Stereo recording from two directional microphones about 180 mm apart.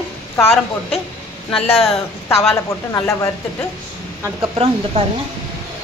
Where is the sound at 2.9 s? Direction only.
15° left (ahead or behind).